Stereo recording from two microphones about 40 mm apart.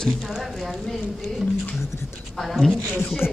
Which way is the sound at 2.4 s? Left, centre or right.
Centre.